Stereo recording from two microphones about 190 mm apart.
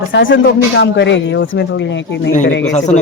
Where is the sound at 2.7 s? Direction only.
35° left (ahead or behind).